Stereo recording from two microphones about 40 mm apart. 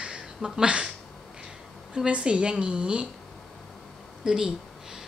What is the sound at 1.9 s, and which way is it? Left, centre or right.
A woman's voice, right.